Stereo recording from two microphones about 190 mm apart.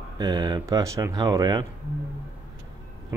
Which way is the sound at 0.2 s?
20° right (ahead or behind).